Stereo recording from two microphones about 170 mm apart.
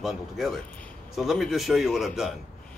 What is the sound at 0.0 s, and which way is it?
Speech, centre (ahead or behind).